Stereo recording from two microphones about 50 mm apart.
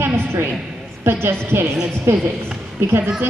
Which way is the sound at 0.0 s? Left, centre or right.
Right.